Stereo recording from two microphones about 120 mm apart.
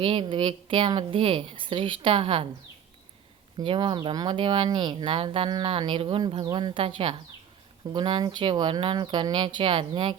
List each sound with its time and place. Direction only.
0.0 s speech: 45° right (ahead or behind)
3.6 s speech: 45° right (ahead or behind)